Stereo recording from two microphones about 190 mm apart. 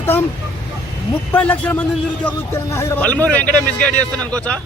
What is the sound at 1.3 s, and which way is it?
A man's voice, 10° left (ahead or behind).